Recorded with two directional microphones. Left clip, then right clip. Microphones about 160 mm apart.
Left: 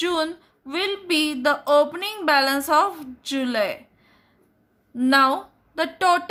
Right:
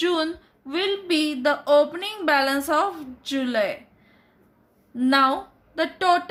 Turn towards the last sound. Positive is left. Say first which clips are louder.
# left 1 dB
turn(degrees=35)  # may be behind; listen again after turning